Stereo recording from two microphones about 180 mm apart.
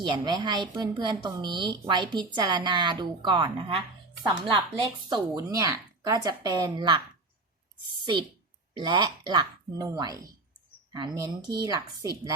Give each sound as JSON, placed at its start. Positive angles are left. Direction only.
{"t": 0.0, "sound": "speech", "side_deg": -25}
{"t": 8.7, "sound": "speech", "side_deg": -25}